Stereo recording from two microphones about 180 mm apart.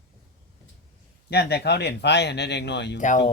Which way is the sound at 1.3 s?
65° left (ahead or behind).